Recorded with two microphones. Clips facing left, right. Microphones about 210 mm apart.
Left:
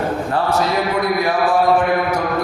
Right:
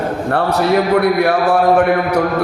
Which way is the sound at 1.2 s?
65° right (ahead or behind).